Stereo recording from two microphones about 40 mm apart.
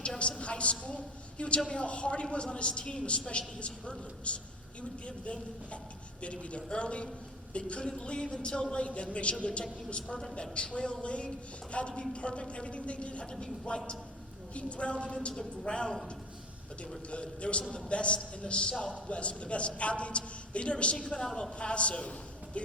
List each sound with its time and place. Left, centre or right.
0.2 s a woman's voice: left
17.1 s a man's voice: left